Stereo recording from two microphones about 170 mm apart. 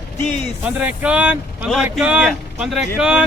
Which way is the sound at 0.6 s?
10° right (ahead or behind).